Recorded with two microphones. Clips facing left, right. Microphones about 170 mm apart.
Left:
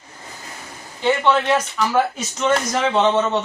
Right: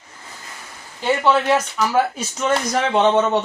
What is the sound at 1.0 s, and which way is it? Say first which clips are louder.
Speech: even; 5° right (ahead or behind).